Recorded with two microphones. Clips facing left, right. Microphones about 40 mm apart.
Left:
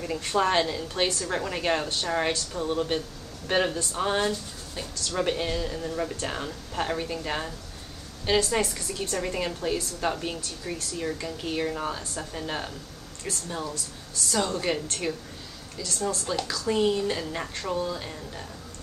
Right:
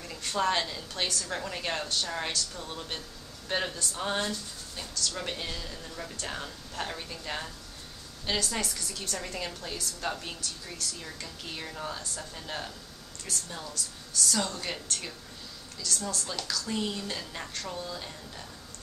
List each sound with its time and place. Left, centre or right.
0.0 s a woman's voice: left
8.3 s a woman's voice: left